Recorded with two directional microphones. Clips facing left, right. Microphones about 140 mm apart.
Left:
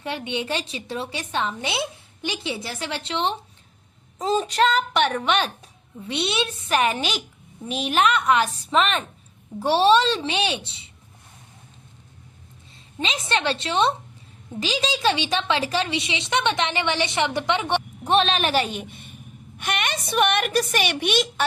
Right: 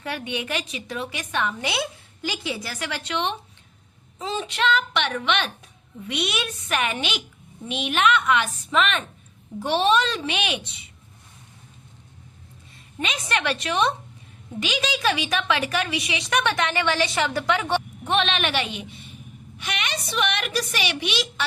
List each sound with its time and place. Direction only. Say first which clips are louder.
0.0 s a woman's voice: left 2 dB; 25° left (ahead or behind)
4.2 s a woman's voice: left 5 dB; 40° left (ahead or behind)
12.7 s a woman's voice: left 1 dB; 25° left (ahead or behind)
18.0 s a woman's voice: left 6 dB; 35° left (ahead or behind)